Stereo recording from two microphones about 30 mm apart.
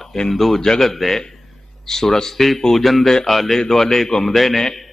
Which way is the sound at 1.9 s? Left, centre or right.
Centre.